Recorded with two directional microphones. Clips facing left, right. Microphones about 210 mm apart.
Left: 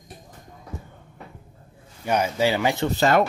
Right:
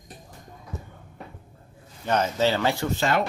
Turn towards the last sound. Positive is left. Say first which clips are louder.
# left 5 dB
turn(degrees=40)  # may be behind; listen again after turning